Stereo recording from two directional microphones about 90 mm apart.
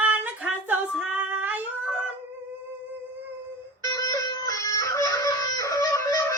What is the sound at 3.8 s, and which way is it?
Music, 45° left (ahead or behind).